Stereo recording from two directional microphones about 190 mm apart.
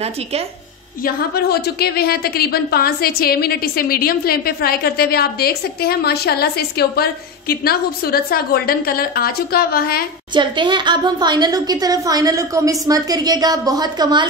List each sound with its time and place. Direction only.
1.0 s a woman's voice: 55° left (ahead or behind)
10.3 s a woman's voice: 25° right (ahead or behind)